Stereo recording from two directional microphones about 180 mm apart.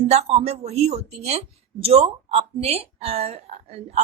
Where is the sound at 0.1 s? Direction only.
35° right (ahead or behind).